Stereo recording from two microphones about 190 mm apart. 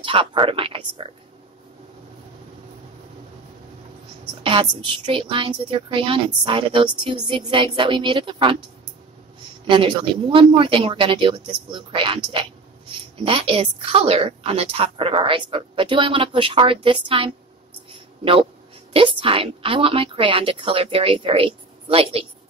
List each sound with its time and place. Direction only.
0.0 s a woman's voice: 25° right (ahead or behind)
4.4 s a woman's voice: 25° right (ahead or behind)
9.7 s a woman's voice: 25° right (ahead or behind)
18.9 s a woman's voice: 30° right (ahead or behind)